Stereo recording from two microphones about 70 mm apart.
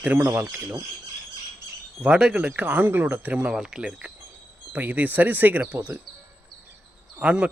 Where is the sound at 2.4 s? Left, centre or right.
Right.